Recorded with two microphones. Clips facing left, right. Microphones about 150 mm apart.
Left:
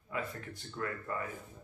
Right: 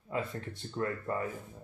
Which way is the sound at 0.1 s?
30° right (ahead or behind).